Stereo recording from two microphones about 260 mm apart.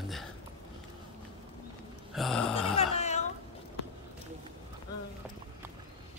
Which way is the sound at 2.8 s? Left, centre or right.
Left.